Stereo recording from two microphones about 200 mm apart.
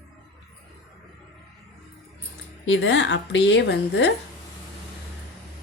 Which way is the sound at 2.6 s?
70° left (ahead or behind).